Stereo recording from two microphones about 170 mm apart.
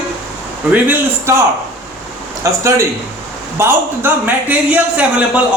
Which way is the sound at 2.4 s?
20° right (ahead or behind).